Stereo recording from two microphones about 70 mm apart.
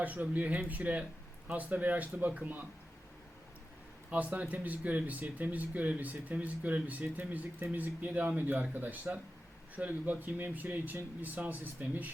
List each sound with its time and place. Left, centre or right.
0.0 s speech: right
4.1 s speech: right